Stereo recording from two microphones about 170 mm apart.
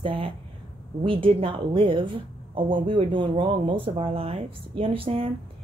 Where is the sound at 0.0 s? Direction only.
30° right (ahead or behind).